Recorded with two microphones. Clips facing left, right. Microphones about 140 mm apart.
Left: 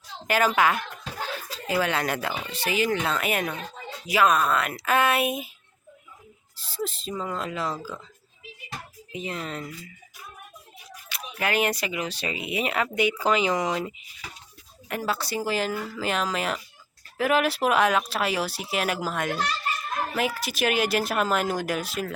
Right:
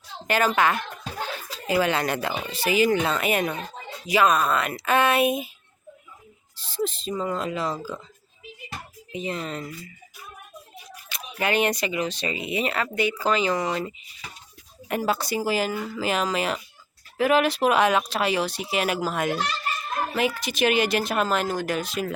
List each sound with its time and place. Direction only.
0.3 s speech: 5° left (ahead or behind)
6.6 s speech: centre (ahead or behind)
9.1 s speech: centre (ahead or behind)
11.1 s speech: centre (ahead or behind)
14.8 s speech: 20° right (ahead or behind); by 22.0 s 5° left (ahead or behind)